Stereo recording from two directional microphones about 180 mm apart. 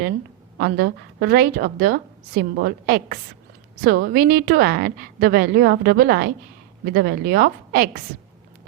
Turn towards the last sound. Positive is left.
turn(degrees=-55)  # may be behind; listen again after turning